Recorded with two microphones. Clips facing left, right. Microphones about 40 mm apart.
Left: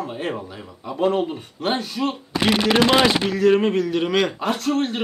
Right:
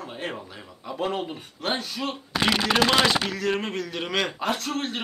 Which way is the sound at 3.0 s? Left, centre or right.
Left.